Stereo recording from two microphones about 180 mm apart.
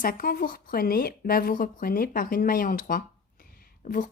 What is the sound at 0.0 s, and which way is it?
Speech, 50° left (ahead or behind).